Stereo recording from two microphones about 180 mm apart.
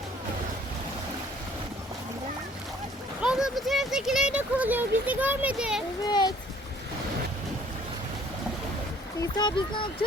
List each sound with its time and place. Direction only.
3.2 s speech: 5° right (ahead or behind)
6.1 s a child's voice: 25° left (ahead or behind)
9.2 s a child's voice: 25° left (ahead or behind)